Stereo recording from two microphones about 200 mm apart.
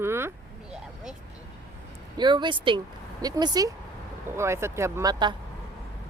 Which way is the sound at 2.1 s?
20° right (ahead or behind).